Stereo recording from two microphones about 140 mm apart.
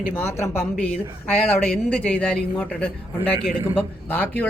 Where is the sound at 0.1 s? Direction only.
15° left (ahead or behind).